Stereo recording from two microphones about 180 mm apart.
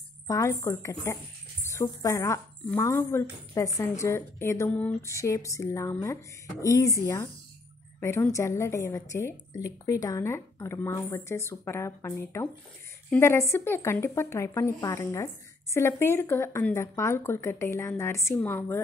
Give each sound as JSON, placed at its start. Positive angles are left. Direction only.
{"t": 0.3, "sound": "speech", "side_deg": 15}